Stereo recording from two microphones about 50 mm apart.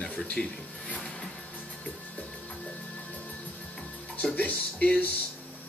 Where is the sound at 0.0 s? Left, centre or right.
Centre.